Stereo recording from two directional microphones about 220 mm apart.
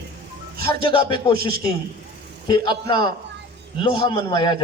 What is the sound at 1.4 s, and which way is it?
Speech, 45° right (ahead or behind).